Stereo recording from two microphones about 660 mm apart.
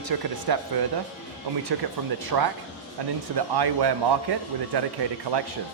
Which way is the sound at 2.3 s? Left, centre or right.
Right.